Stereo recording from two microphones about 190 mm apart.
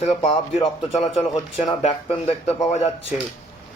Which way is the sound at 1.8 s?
30° left (ahead or behind).